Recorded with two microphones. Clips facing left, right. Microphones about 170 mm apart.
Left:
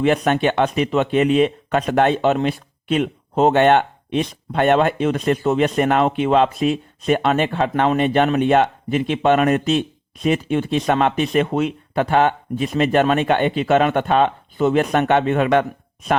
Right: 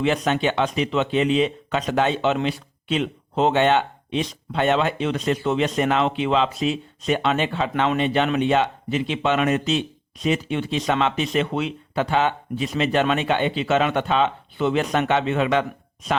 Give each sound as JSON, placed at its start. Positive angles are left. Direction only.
{"t": 0.0, "sound": "speech", "side_deg": 55}